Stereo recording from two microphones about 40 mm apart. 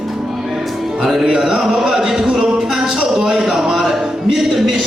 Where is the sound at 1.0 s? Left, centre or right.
Centre.